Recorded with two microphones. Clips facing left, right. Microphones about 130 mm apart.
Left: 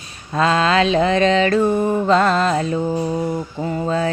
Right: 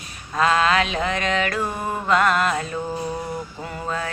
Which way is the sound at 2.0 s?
30° left (ahead or behind).